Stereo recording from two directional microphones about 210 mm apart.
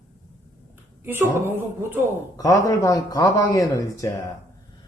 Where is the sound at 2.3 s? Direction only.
15° left (ahead or behind).